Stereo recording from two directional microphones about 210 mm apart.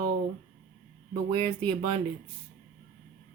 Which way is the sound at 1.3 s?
25° right (ahead or behind).